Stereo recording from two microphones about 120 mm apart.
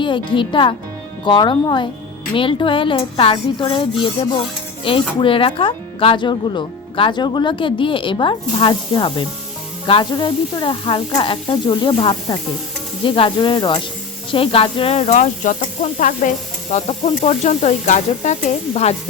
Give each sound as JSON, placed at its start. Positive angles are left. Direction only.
{"t": 0.0, "sound": "speech", "side_deg": 40}
{"t": 16.7, "sound": "stir", "side_deg": 80}